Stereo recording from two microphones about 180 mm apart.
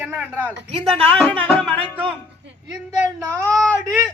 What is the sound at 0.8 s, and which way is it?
Speech, 30° right (ahead or behind).